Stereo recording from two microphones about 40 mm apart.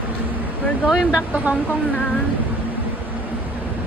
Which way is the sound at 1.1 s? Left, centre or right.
Right.